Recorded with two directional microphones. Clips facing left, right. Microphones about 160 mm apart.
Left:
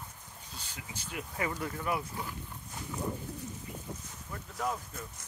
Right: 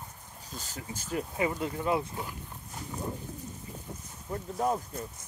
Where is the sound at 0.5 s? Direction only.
45° right (ahead or behind).